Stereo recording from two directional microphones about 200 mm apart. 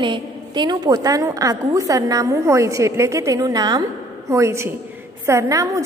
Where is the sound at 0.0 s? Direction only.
25° right (ahead or behind).